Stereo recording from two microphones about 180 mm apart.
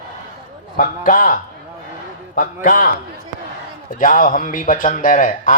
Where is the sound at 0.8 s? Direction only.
45° left (ahead or behind).